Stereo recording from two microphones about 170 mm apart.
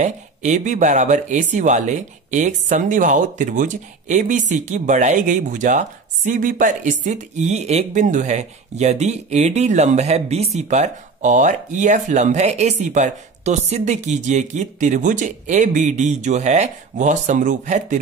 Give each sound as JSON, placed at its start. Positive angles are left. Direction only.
{"t": 0.0, "sound": "speech", "side_deg": -45}